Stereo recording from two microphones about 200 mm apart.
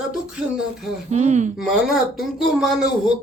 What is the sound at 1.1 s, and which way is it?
Speech, 35° right (ahead or behind).